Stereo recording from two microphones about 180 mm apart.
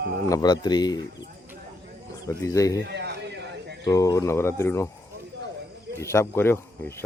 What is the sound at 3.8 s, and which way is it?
Speech, 20° left (ahead or behind).